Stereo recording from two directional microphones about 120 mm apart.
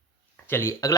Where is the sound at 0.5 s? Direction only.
25° left (ahead or behind).